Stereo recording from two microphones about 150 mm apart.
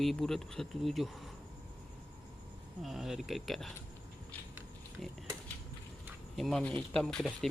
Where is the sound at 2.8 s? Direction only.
Centre (ahead or behind).